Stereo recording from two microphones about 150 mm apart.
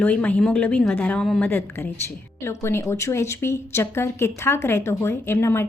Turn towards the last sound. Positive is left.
turn(degrees=15)  # may be behind; listen again after turning